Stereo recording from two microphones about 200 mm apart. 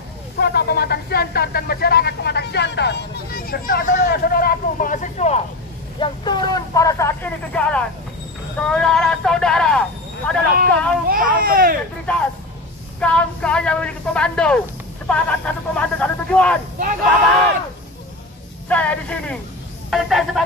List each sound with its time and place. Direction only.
0.4 s speech: 50° left (ahead or behind); by 5.4 s 35° left (ahead or behind)
5.9 s speech: 25° left (ahead or behind); by 11.0 s 5° left (ahead or behind)
11.1 s speech: 45° right (ahead or behind)
12.1 s speech: 5° left (ahead or behind)
18.7 s speech: 5° left (ahead or behind)